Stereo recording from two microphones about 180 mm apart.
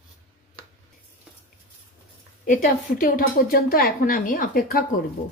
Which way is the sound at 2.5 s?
50° left (ahead or behind).